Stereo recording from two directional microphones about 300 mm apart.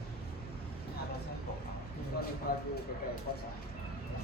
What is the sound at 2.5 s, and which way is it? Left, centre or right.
Speech, left.